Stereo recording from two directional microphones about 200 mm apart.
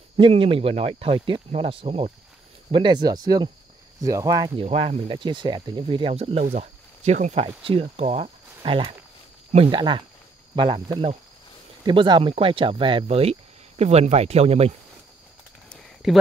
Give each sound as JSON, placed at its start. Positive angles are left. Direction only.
{"t": 0.2, "sound": "speech", "side_deg": -25}
{"t": 4.6, "sound": "speech", "side_deg": -30}
{"t": 15.7, "sound": "a sound", "side_deg": 0}